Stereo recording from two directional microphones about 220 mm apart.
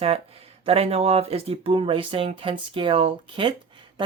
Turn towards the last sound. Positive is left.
turn(degrees=-20)  # may be behind; listen again after turning